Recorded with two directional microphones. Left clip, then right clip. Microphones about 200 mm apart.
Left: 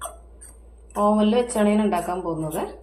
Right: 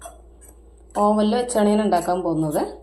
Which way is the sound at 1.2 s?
35° right (ahead or behind).